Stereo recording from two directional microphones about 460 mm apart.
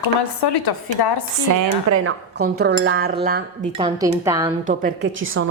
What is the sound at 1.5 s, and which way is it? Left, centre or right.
Speech, right.